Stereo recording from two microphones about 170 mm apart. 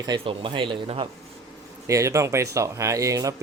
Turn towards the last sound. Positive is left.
turn(degrees=-20)  # may be behind; listen again after turning